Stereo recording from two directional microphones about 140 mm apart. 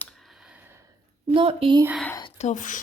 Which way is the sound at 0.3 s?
5° right (ahead or behind).